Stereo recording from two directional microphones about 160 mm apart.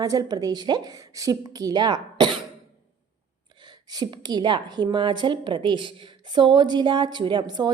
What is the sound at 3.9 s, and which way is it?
A woman's voice, 25° right (ahead or behind).